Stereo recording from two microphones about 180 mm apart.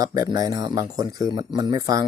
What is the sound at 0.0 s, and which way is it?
Speech, 20° right (ahead or behind).